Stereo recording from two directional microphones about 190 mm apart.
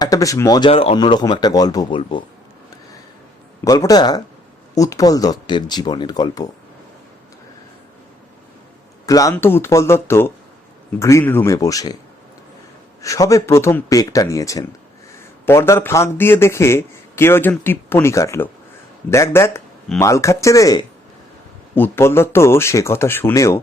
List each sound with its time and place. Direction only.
0.0 s a man's voice: 20° left (ahead or behind)
0.7 s speech: 30° left (ahead or behind)
3.6 s speech: 20° left (ahead or behind)
9.0 s a man's voice: 20° left (ahead or behind)
13.0 s a man's voice: 15° left (ahead or behind)